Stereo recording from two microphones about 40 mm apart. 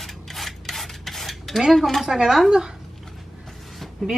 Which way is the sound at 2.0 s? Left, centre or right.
Centre.